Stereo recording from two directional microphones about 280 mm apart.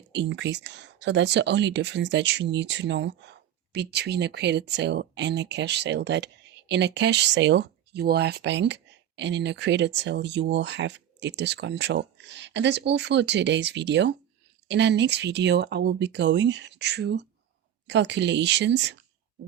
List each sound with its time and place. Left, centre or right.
0.1 s speech: right